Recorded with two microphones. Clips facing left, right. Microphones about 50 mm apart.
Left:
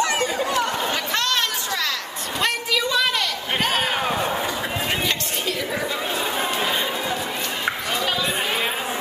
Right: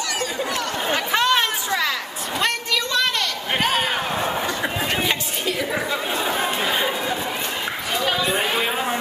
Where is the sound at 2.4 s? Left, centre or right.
Centre.